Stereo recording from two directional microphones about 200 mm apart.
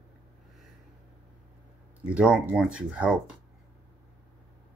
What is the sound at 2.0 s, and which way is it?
Speech, 5° right (ahead or behind).